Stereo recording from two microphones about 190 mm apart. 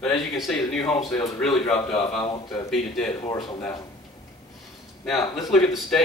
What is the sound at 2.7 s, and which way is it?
Speech, centre (ahead or behind).